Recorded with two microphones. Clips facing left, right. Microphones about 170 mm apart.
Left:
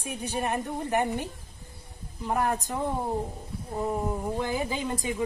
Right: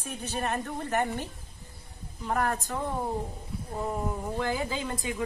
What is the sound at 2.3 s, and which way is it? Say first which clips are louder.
Speech: left 2 dB; 15° left (ahead or behind).